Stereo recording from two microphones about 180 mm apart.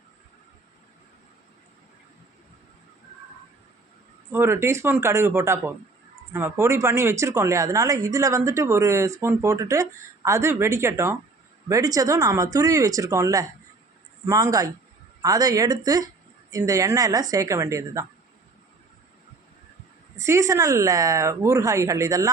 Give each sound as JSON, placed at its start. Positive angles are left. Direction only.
{"t": 4.3, "sound": "speech", "side_deg": -15}
{"t": 20.1, "sound": "speech", "side_deg": -15}